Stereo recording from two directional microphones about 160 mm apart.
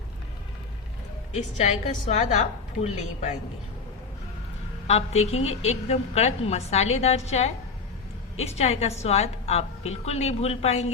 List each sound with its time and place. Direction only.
1.5 s a woman's voice: 45° left (ahead or behind)
4.9 s a woman's voice: 40° left (ahead or behind)